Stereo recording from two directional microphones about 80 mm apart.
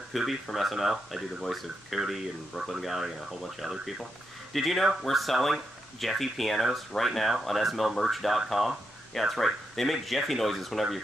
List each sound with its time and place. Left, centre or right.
0.1 s speech: centre